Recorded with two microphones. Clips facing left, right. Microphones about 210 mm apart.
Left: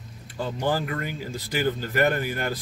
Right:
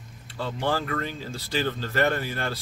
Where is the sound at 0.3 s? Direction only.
15° left (ahead or behind).